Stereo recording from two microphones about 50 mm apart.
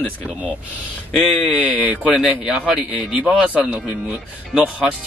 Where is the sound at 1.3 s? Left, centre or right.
Left.